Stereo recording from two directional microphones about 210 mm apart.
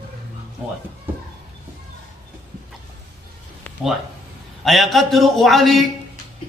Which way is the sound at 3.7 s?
10° left (ahead or behind).